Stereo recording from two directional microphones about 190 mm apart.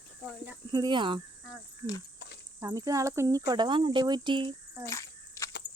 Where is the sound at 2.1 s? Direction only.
65° left (ahead or behind).